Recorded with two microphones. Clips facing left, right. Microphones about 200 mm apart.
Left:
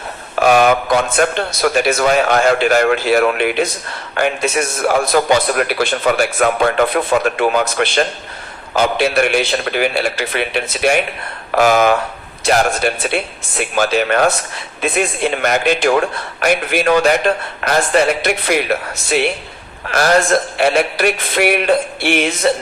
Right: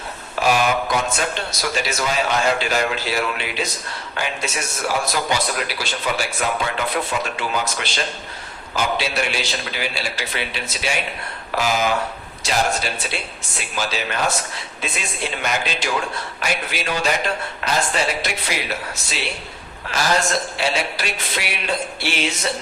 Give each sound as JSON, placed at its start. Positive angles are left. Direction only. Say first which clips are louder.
{"t": 0.4, "sound": "a man's voice", "louder": "left 7 dB", "side_deg": 55}